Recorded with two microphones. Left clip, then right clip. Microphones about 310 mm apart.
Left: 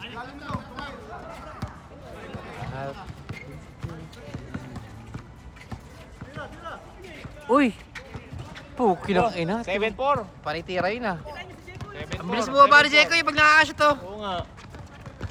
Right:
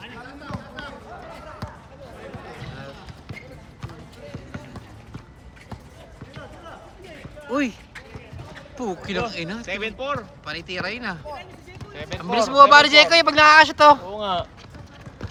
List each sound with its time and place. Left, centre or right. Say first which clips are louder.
7.5 s speech: left 4 dB; centre
8.8 s speech: left 6 dB; centre
12.2 s speech: right 4 dB; centre; by 14.4 s right